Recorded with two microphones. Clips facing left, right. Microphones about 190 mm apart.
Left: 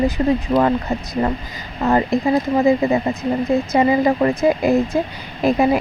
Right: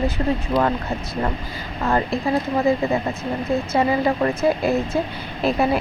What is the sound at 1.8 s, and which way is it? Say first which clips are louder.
A woman's voice: left 4 dB; 20° left (ahead or behind).